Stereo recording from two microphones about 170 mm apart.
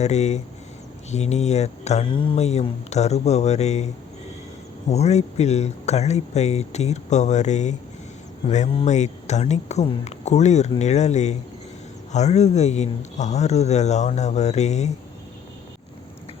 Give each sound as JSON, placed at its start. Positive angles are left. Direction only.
{"t": 0.0, "sound": "speech", "side_deg": 40}
{"t": 4.9, "sound": "speech", "side_deg": 40}